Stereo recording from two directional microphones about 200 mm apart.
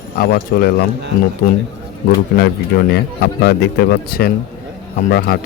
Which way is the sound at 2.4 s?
50° left (ahead or behind).